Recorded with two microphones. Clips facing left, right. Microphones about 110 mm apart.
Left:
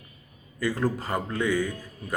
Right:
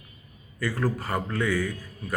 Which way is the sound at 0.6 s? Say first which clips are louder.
Left 1 dB; 20° left (ahead or behind).